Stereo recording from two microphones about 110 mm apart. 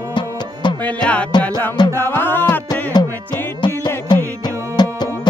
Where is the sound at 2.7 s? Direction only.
40° left (ahead or behind).